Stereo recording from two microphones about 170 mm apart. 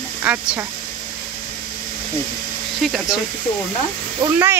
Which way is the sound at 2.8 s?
Centre (ahead or behind).